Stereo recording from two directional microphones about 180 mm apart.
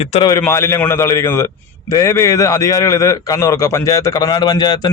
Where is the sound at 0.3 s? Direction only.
15° left (ahead or behind).